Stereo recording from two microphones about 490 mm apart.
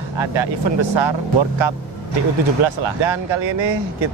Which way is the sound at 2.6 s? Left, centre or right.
Right.